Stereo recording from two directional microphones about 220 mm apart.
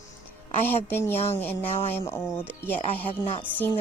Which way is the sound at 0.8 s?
10° left (ahead or behind).